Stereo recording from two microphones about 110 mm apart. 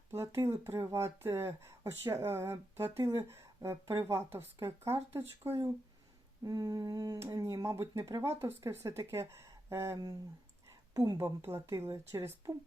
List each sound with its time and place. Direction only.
0.1 s speech: 25° right (ahead or behind)
6.4 s humming: 35° right (ahead or behind)
7.2 s speech: 30° right (ahead or behind)